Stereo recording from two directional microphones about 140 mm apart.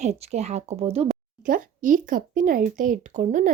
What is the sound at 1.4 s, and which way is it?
A woman's voice, 75° right (ahead or behind).